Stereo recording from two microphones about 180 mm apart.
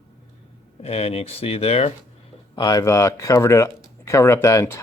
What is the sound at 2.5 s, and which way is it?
Speech, 20° left (ahead or behind).